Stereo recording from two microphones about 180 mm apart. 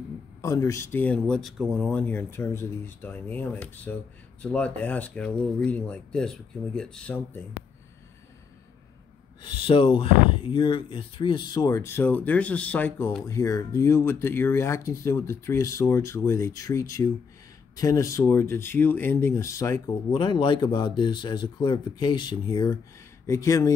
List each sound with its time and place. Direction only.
0.4 s speech: 15° left (ahead or behind)
9.4 s speech: 30° left (ahead or behind)